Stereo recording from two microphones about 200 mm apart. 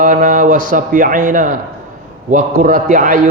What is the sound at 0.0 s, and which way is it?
Speech, 45° right (ahead or behind).